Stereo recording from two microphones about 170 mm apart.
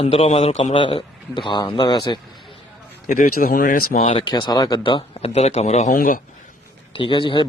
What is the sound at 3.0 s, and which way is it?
Speech, 50° left (ahead or behind).